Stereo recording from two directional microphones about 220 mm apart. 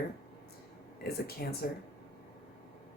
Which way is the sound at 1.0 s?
45° left (ahead or behind).